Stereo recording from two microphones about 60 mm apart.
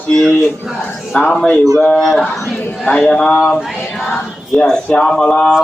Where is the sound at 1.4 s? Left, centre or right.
Left.